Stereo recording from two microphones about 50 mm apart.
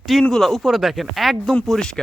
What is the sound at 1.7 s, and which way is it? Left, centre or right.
Speech, centre.